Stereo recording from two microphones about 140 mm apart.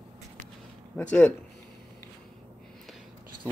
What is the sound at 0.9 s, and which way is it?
Speech, 10° left (ahead or behind).